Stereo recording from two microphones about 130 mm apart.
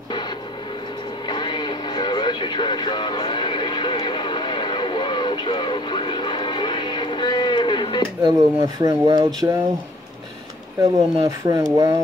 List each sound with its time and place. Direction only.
1.2 s radio: 35° left (ahead or behind)
8.2 s speech: 30° right (ahead or behind)
10.8 s speech: 25° right (ahead or behind)